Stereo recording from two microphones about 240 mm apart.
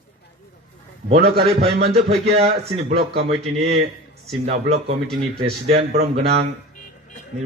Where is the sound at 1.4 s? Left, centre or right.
Right.